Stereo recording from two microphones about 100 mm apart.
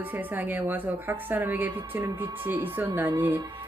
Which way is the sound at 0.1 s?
20° right (ahead or behind).